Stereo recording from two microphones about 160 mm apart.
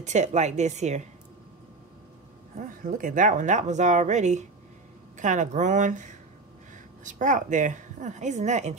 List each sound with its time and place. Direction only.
0.0 s speech: 45° right (ahead or behind)
2.5 s speech: 55° right (ahead or behind)